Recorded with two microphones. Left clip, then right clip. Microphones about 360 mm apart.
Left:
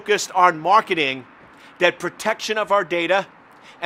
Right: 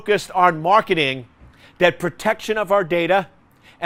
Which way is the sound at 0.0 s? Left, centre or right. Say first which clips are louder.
Even; right.